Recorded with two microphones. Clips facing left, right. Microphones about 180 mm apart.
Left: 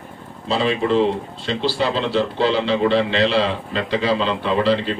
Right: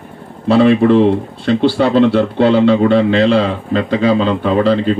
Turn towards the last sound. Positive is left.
turn(degrees=-45)  # may be behind; listen again after turning